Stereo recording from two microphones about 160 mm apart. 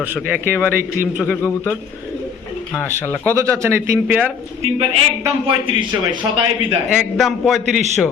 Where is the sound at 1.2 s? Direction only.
10° left (ahead or behind).